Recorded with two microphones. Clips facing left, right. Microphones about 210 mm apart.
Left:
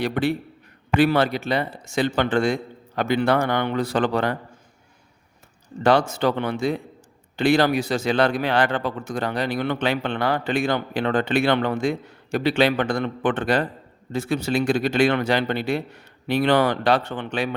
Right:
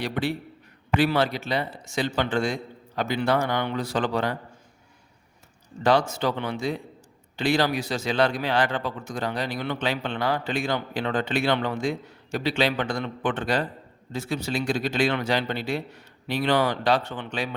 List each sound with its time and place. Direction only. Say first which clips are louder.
0.0 s a man's voice: left 5 dB; 55° left (ahead or behind)
5.8 s a man's voice: left 3 dB; 60° left (ahead or behind)